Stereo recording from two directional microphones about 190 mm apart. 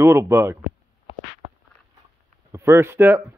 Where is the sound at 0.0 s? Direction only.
15° right (ahead or behind).